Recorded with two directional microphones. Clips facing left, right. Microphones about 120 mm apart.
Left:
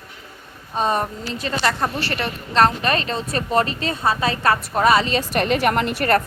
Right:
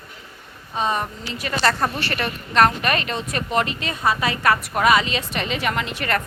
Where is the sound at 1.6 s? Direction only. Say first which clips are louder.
Right 1 dB; 15° left (ahead or behind).